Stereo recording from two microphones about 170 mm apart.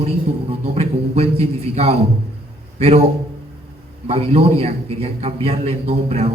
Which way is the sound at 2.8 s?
40° right (ahead or behind).